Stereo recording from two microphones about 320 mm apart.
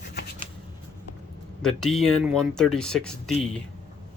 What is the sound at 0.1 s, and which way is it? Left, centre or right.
Shuffling cards, left.